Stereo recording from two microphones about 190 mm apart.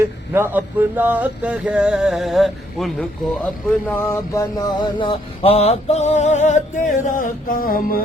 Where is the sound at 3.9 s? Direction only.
15° left (ahead or behind); by 8.0 s 50° left (ahead or behind).